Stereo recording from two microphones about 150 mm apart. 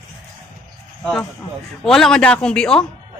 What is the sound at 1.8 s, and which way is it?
A man's voice, 5° left (ahead or behind).